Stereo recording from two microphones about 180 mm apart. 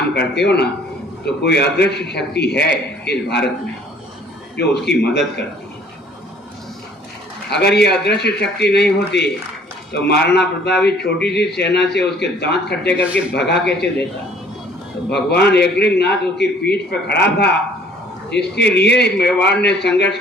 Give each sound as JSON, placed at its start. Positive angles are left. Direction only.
{"t": 0.1, "sound": "a man's voice", "side_deg": 70}
{"t": 4.5, "sound": "a man's voice", "side_deg": 70}
{"t": 7.5, "sound": "a man's voice", "side_deg": 70}
{"t": 15.1, "sound": "a man's voice", "side_deg": 65}
{"t": 18.3, "sound": "a man's voice", "side_deg": 70}